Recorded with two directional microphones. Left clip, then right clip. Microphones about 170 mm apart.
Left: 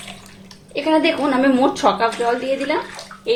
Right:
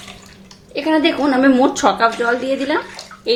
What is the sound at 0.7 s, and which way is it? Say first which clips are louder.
A woman's voice: right 1 dB; 20° right (ahead or behind).